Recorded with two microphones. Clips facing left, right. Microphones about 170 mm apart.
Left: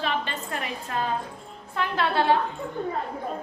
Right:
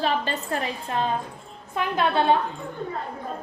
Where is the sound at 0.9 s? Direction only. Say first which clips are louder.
Right 1 dB; 20° right (ahead or behind).